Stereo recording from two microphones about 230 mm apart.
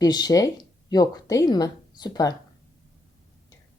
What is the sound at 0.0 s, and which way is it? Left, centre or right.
Speech, centre.